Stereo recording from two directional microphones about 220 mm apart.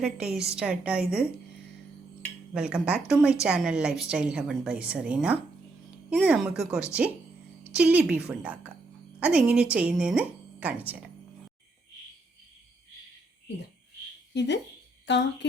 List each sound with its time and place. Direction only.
0.0 s a woman's voice: 5° right (ahead or behind)
14.3 s speech: 50° left (ahead or behind)